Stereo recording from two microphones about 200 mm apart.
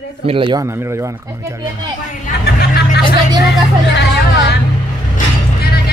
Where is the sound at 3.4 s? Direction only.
60° left (ahead or behind).